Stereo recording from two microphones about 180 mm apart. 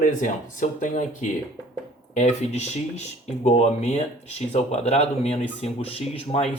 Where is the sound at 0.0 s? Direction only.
45° left (ahead or behind).